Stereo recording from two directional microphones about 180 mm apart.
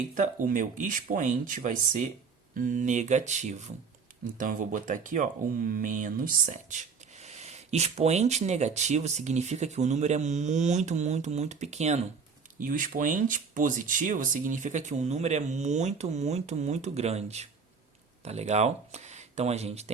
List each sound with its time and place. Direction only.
0.1 s speech: 45° right (ahead or behind)